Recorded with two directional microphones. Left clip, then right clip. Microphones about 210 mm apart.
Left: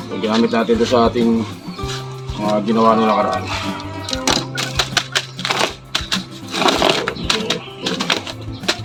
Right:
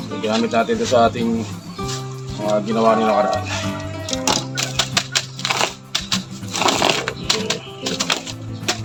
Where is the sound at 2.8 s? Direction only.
15° right (ahead or behind).